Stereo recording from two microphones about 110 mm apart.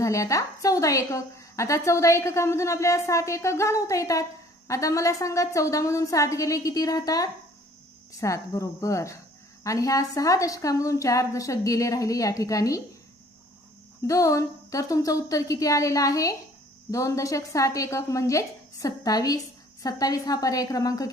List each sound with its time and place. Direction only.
0.0 s a woman's voice: 30° left (ahead or behind)
14.1 s a woman's voice: 30° left (ahead or behind)